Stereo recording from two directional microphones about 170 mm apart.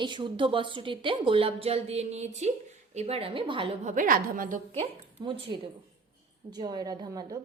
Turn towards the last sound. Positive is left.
turn(degrees=-25)  # may be behind; listen again after turning